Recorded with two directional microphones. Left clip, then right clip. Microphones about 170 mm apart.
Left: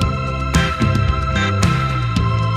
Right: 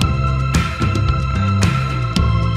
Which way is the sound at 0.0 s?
Centre (ahead or behind).